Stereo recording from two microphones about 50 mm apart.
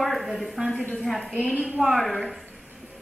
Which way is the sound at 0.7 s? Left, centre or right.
Left.